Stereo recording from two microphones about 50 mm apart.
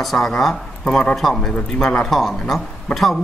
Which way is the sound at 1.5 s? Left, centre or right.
Centre.